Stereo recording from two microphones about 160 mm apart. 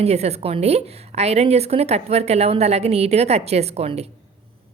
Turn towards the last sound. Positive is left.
turn(degrees=-40)  # may be behind; listen again after turning